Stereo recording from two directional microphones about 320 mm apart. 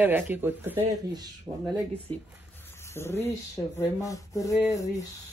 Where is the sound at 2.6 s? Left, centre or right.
Centre.